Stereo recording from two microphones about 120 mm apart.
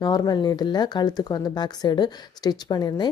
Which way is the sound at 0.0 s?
35° left (ahead or behind).